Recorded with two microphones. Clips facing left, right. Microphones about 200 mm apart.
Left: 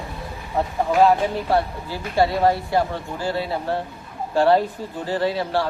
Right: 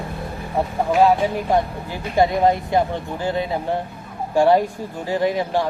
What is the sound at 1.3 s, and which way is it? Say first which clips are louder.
Speech: right 1 dB; 15° right (ahead or behind).